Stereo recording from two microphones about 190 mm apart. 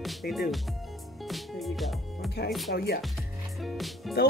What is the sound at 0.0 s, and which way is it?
Speech, centre (ahead or behind).